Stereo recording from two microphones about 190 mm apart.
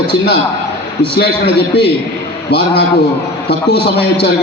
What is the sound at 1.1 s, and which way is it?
Speech, 60° left (ahead or behind).